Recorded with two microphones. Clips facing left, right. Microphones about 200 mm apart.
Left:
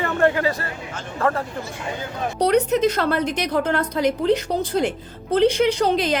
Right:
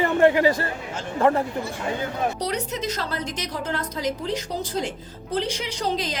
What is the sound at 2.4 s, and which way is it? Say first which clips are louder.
A woman's voice: left 10 dB; 60° left (ahead or behind).